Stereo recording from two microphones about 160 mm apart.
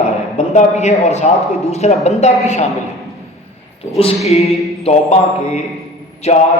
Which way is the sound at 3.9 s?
40° left (ahead or behind).